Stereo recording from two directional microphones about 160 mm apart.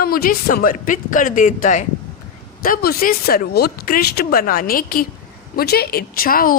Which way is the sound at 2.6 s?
65° left (ahead or behind).